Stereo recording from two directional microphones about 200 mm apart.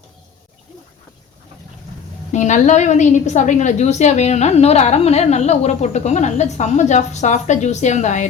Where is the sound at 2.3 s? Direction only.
35° left (ahead or behind).